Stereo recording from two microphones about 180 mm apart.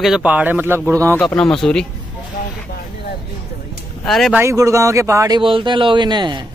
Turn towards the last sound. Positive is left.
turn(degrees=-25)  # may be behind; listen again after turning